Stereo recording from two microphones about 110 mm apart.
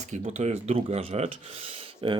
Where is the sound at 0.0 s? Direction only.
90° right.